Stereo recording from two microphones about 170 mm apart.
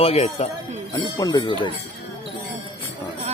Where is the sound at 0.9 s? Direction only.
25° left (ahead or behind).